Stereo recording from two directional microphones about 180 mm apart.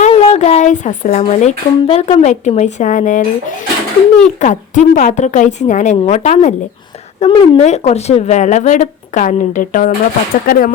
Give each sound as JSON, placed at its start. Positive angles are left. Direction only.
{"t": 0.0, "sound": "a woman's voice", "side_deg": 35}
{"t": 4.4, "sound": "a woman's voice", "side_deg": 40}
{"t": 7.2, "sound": "a woman's voice", "side_deg": 30}
{"t": 7.6, "sound": "a woman's voice", "side_deg": 40}